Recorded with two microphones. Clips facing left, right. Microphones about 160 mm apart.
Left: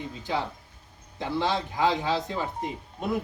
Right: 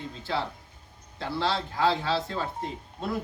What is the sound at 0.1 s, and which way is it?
Speech, 15° left (ahead or behind).